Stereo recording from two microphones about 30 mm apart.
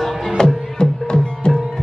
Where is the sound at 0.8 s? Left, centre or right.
Left.